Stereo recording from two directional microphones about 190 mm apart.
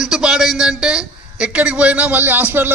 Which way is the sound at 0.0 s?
Centre (ahead or behind).